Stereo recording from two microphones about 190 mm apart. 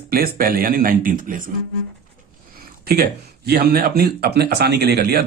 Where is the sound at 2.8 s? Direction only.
55° right (ahead or behind).